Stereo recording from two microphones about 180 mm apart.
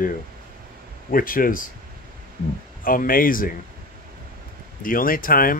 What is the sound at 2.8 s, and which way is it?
Speech, 50° left (ahead or behind).